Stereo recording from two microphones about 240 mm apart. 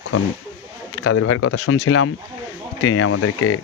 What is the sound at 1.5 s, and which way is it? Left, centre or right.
Speech, left.